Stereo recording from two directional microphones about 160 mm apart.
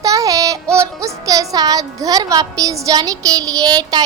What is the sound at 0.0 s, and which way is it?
Child singing, 20° right (ahead or behind).